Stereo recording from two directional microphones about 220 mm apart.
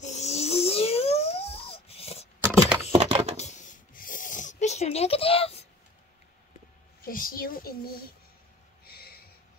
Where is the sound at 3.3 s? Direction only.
30° left (ahead or behind).